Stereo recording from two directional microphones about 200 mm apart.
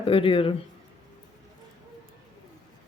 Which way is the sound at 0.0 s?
25° left (ahead or behind).